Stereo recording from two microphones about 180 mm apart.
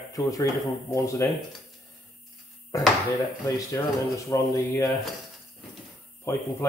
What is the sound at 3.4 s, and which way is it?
Speech, 20° left (ahead or behind).